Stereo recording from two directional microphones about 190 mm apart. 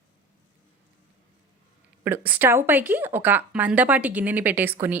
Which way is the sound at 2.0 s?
10° right (ahead or behind).